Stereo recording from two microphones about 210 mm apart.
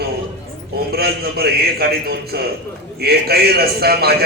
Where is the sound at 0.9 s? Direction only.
45° right (ahead or behind).